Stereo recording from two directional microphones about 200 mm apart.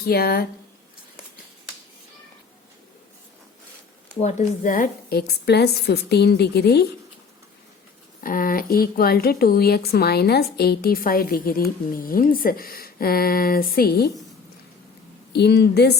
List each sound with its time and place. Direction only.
0.0 s speech: 50° left (ahead or behind)
4.2 s speech: 35° left (ahead or behind); by 6.8 s 55° left (ahead or behind)
8.2 s speech: 45° left (ahead or behind)
15.3 s a woman's voice: 55° left (ahead or behind)